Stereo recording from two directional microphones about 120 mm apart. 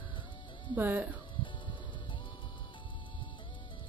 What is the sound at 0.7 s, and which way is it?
Speech, 15° right (ahead or behind).